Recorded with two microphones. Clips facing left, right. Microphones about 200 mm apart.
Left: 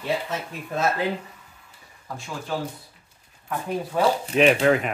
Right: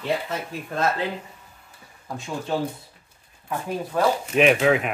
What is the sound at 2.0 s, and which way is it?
Speech, 20° right (ahead or behind).